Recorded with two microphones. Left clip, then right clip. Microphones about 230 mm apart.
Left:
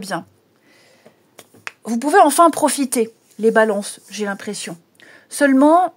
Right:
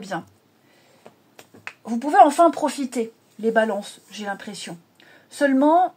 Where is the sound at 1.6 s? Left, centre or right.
Left.